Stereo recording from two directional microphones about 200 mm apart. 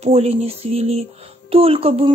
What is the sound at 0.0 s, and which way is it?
A woman's voice, 30° right (ahead or behind).